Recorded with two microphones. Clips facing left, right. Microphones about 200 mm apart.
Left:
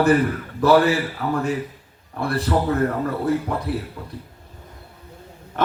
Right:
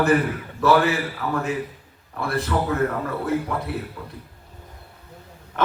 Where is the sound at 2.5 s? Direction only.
35° left (ahead or behind).